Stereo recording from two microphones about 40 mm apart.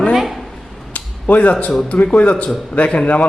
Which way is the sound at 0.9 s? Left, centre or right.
Left.